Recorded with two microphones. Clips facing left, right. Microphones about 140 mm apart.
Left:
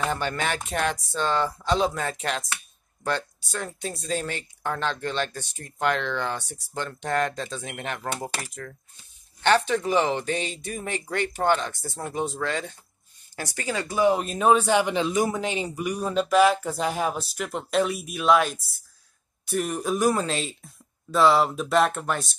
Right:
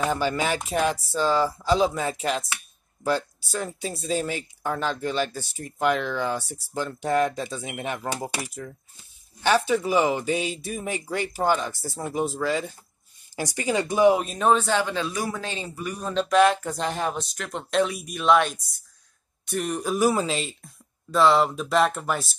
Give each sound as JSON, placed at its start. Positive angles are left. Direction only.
{"t": 0.0, "sound": "speech", "side_deg": -5}
{"t": 13.4, "sound": "speech", "side_deg": -15}
{"t": 14.1, "sound": "speech", "side_deg": 0}